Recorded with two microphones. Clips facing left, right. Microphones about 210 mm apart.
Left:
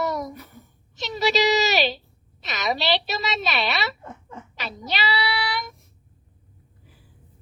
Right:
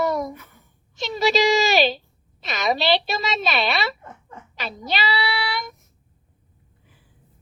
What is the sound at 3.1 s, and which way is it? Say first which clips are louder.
Speech: right 2 dB; 50° right (ahead or behind).